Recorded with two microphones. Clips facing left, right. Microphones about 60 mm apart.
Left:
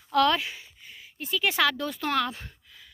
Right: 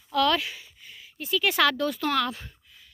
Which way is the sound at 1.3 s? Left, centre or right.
Centre.